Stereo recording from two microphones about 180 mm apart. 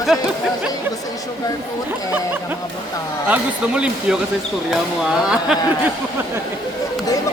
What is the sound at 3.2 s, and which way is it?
Speech, 5° right (ahead or behind).